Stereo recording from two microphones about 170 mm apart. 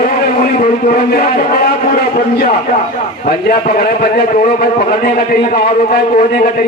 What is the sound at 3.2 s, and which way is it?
A man's voice, 60° left (ahead or behind).